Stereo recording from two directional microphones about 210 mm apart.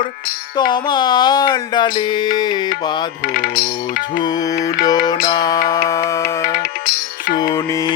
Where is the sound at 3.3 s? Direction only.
45° left (ahead or behind).